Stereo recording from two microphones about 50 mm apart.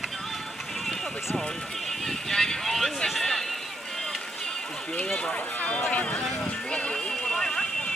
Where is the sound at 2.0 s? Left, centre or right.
Centre.